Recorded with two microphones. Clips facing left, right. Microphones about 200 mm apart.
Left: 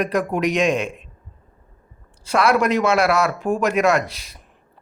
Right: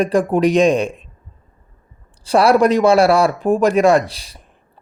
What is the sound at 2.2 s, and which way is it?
Speech, 35° right (ahead or behind).